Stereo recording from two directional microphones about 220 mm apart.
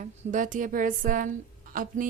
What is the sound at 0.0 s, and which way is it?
A woman's voice, 35° right (ahead or behind).